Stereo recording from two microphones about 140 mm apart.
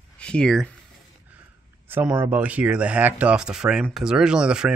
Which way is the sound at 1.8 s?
15° right (ahead or behind).